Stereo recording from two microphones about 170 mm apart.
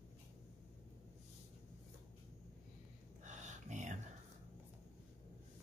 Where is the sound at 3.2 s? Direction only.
45° right (ahead or behind).